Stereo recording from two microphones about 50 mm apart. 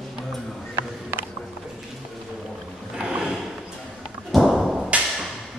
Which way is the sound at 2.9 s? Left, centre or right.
Centre.